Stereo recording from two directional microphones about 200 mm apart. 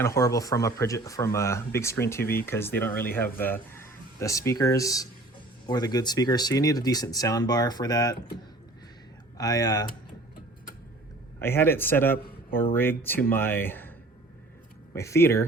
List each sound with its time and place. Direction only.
0.0 s speech: 15° left (ahead or behind)
9.4 s speech: 20° left (ahead or behind)
11.3 s speech: 10° left (ahead or behind)
14.9 s speech: 15° left (ahead or behind)